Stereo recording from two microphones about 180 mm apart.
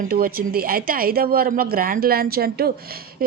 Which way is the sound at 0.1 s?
55° right (ahead or behind).